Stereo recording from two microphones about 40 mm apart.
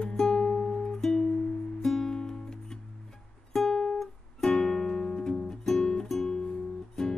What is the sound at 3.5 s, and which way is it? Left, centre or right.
Music, centre.